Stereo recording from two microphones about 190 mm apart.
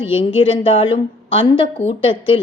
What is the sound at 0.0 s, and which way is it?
A woman's voice, 30° left (ahead or behind).